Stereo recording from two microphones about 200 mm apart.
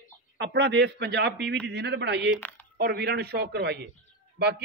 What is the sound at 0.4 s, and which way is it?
A man's voice, 60° right (ahead or behind).